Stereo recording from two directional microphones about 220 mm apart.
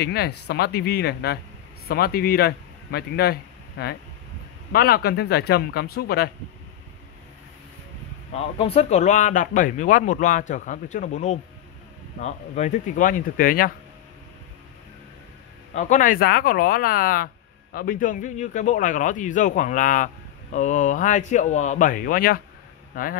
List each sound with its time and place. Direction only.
0.0 s a man's voice: 45° left (ahead or behind)
8.3 s speech: 25° left (ahead or behind)
15.7 s speech: 35° left (ahead or behind)